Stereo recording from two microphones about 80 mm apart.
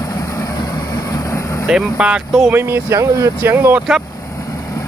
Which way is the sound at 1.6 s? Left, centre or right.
Centre.